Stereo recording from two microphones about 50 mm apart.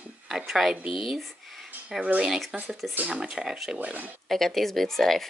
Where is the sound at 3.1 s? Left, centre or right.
Centre.